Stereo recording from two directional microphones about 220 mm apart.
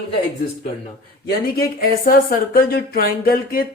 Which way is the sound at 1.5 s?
40° left (ahead or behind).